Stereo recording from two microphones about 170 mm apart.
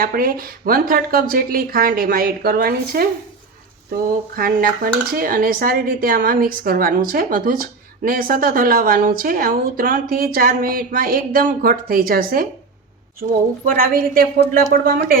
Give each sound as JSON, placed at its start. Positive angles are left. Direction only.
{"t": 0.0, "sound": "speech", "side_deg": -60}
{"t": 13.7, "sound": "speech", "side_deg": -55}